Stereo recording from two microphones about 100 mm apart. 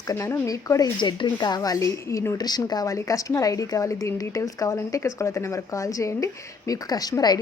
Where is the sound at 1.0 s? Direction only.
50° left (ahead or behind); by 2.3 s 30° left (ahead or behind).